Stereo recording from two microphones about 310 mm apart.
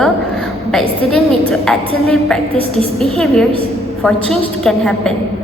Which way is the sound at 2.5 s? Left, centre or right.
Centre.